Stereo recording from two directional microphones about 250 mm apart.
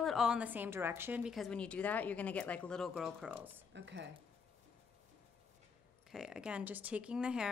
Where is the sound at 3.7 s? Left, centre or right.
Right.